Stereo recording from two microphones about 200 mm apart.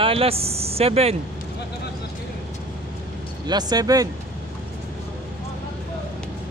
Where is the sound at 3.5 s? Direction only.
20° right (ahead or behind).